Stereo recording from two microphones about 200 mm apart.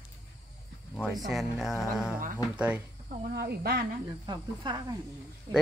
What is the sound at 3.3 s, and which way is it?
Speech, 50° right (ahead or behind).